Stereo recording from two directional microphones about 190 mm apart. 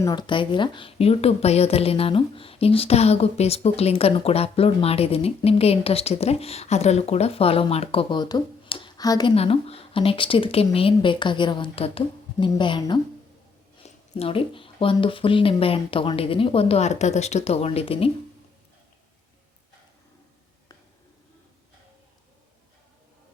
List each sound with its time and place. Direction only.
0.0 s a woman's voice: 20° left (ahead or behind)